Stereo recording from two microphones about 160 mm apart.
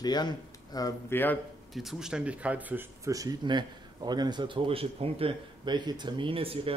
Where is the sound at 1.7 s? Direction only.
Centre (ahead or behind).